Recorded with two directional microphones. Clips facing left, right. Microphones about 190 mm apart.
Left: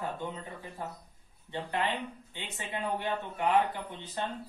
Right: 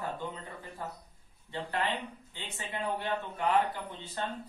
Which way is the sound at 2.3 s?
15° left (ahead or behind).